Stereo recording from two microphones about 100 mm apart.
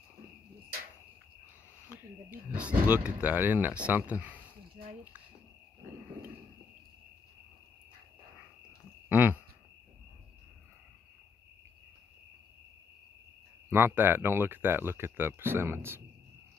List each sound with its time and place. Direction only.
1.9 s speech: 10° right (ahead or behind)
9.1 s cricket: 20° right (ahead or behind)
13.7 s speech: 20° right (ahead or behind)